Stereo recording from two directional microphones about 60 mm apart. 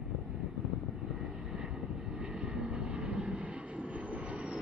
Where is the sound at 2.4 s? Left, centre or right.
Centre.